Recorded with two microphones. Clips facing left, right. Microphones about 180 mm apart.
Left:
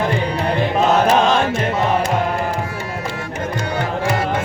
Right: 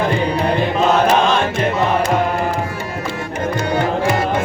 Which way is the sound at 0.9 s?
40° left (ahead or behind).